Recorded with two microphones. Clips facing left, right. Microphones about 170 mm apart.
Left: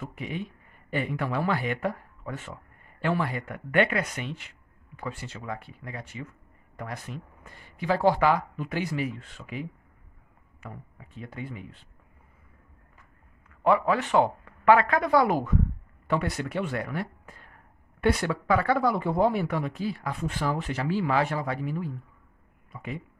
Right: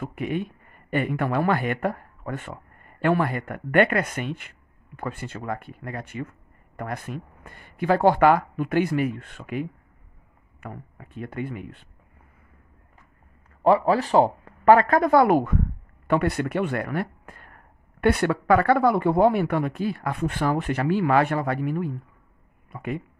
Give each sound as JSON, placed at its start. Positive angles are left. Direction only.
{"t": 0.0, "sound": "a man's voice", "side_deg": -60}
{"t": 13.7, "sound": "speech", "side_deg": -35}